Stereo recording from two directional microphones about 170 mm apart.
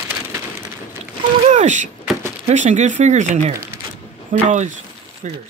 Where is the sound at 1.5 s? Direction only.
45° right (ahead or behind).